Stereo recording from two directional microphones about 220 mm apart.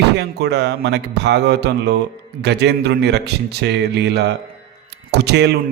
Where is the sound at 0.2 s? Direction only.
50° right (ahead or behind).